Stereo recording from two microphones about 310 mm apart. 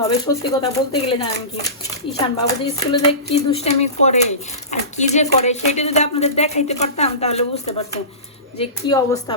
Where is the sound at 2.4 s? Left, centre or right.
Centre.